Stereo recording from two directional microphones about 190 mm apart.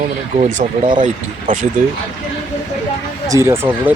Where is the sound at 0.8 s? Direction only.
25° right (ahead or behind).